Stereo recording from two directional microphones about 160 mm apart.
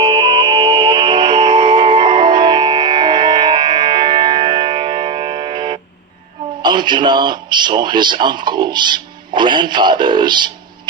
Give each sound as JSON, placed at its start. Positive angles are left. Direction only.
{"t": 0.0, "sound": "music", "side_deg": -30}
{"t": 6.6, "sound": "speech", "side_deg": -30}